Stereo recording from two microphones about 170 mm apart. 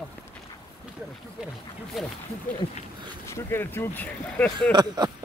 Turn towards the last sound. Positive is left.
turn(degrees=-25)  # may be behind; listen again after turning